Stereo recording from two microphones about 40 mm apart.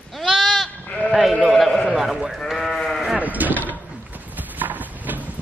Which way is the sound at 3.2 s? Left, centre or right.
Right.